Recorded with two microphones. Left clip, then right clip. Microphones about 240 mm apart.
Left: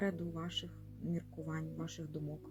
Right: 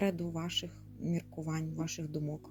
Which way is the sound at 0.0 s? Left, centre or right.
Right.